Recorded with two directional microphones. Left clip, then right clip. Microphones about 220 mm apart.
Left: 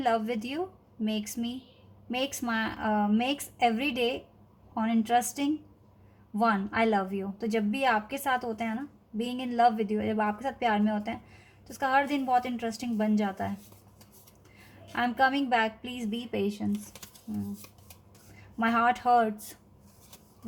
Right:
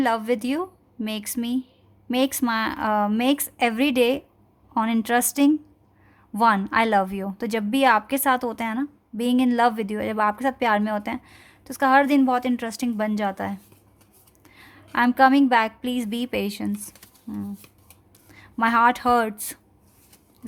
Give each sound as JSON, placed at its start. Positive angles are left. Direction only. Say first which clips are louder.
{"t": 0.0, "sound": "a woman's voice", "louder": "right 6 dB", "side_deg": -50}
{"t": 14.9, "sound": "a woman's voice", "louder": "right 9 dB", "side_deg": -50}
{"t": 18.6, "sound": "a woman's voice", "louder": "right 7 dB", "side_deg": -50}